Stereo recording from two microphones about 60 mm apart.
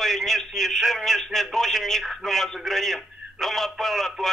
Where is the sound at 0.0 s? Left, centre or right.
Centre.